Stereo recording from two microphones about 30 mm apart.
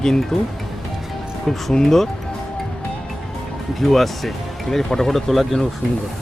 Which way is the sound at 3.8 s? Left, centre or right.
Centre.